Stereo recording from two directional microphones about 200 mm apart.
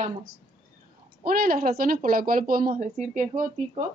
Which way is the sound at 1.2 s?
45° right (ahead or behind).